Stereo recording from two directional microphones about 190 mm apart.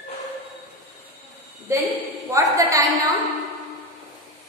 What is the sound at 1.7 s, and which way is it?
A woman's voice, 15° right (ahead or behind).